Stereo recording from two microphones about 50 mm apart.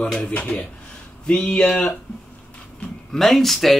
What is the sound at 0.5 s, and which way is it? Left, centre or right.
Speech, left.